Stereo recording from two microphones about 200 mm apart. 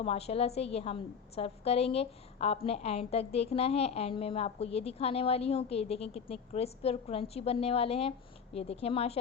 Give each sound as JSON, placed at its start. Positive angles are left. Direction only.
{"t": 0.0, "sound": "a woman's voice", "side_deg": 30}